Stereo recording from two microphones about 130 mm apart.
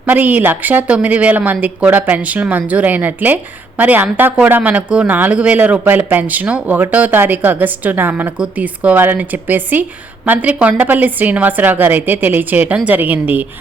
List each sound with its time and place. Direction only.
0.0 s a woman's voice: 15° right (ahead or behind)